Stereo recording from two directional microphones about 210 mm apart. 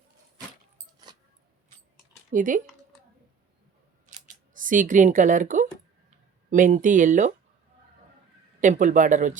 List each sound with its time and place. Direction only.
2.3 s speech: 35° right (ahead or behind)
4.5 s a woman's voice: 40° right (ahead or behind)
8.6 s speech: 35° right (ahead or behind)